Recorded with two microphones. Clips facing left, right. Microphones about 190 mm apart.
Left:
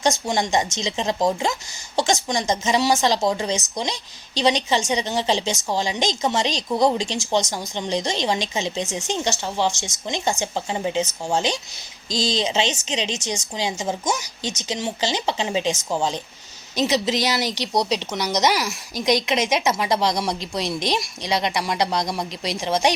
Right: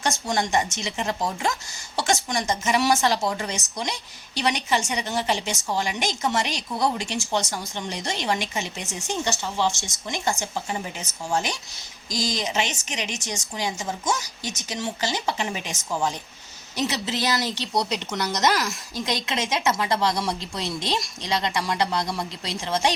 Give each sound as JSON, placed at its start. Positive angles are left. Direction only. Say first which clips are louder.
{"t": 0.0, "sound": "a woman's voice", "louder": "left 4 dB", "side_deg": 15}